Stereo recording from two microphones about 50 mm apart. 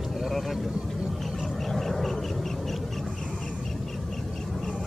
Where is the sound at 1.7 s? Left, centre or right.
Centre.